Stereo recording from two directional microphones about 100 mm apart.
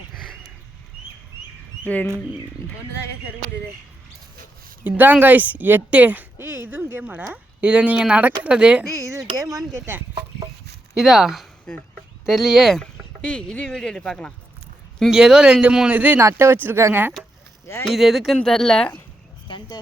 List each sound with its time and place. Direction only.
4.8 s a woman's voice: 20° right (ahead or behind)
8.9 s speech: 30° right (ahead or behind)
10.9 s speech: 5° right (ahead or behind)
11.7 s speech: 10° left (ahead or behind)
12.2 s speech: 5° right (ahead or behind)
15.1 s a woman's voice: 5° right (ahead or behind)
17.8 s speech: centre (ahead or behind)
19.5 s speech: 50° left (ahead or behind)